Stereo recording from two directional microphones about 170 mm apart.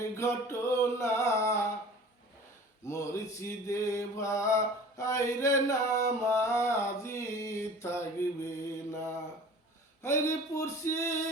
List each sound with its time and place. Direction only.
0.0 s mantra: 15° left (ahead or behind)
2.8 s mantra: 20° left (ahead or behind)